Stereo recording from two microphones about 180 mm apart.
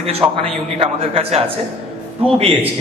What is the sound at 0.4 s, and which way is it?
A man's voice, 35° right (ahead or behind).